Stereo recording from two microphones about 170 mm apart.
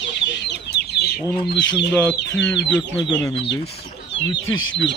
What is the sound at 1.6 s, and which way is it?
Speech, 90° left.